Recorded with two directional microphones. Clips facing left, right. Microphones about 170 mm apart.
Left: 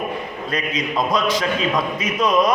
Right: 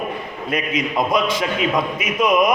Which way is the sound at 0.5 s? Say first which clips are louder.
Right 2 dB; 20° right (ahead or behind).